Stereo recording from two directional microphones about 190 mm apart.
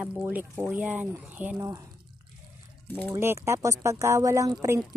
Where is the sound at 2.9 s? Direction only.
10° left (ahead or behind).